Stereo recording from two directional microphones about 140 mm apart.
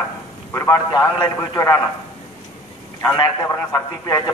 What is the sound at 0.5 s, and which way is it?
A man's voice, 20° left (ahead or behind).